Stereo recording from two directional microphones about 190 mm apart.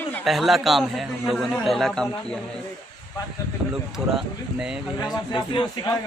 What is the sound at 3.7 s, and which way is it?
A man's voice, 5° right (ahead or behind).